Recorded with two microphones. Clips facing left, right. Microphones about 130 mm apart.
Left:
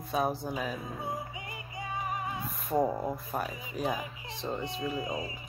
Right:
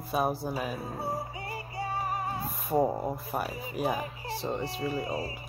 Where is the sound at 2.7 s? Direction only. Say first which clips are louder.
Right 2 dB; 20° right (ahead or behind).